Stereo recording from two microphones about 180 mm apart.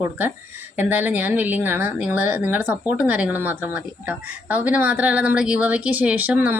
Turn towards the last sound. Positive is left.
turn(degrees=-10)  # may be behind; listen again after turning